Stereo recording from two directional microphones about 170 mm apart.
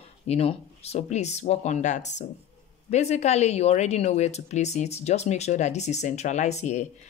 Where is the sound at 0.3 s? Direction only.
35° left (ahead or behind).